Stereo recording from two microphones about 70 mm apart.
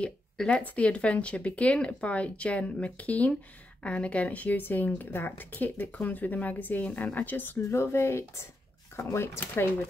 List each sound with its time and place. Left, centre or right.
0.0 s a woman's voice: centre
7.7 s speech: left